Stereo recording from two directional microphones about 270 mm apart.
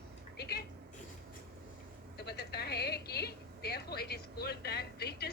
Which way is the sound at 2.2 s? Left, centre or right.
Left.